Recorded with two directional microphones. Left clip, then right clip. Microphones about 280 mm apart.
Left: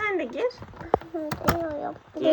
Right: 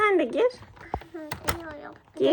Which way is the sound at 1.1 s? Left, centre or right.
Centre.